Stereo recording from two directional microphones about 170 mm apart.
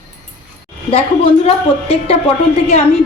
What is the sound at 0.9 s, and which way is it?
A woman's voice, 35° left (ahead or behind).